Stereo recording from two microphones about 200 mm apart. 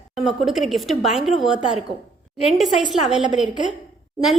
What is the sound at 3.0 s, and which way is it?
Speech, 5° right (ahead or behind).